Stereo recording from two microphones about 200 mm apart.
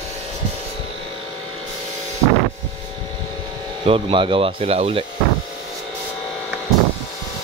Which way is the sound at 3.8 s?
25° right (ahead or behind).